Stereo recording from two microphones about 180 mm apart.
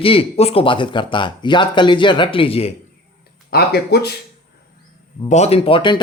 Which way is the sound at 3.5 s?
60° left (ahead or behind).